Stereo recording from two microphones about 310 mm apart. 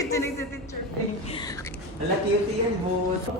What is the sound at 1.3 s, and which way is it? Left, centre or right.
Speech, centre.